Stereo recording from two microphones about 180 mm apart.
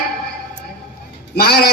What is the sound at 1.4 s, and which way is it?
Speech, 60° left (ahead or behind).